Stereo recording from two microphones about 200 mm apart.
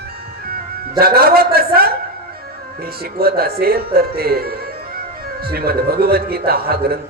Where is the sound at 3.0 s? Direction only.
50° right (ahead or behind).